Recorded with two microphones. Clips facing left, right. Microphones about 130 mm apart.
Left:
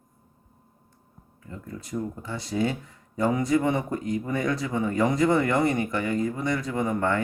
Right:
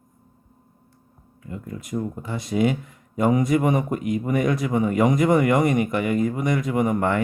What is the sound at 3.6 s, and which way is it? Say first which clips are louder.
Speech: right 4 dB; 20° right (ahead or behind).